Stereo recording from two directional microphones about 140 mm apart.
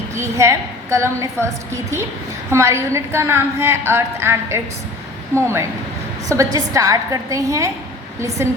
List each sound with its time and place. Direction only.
0.1 s a woman's voice: 20° right (ahead or behind)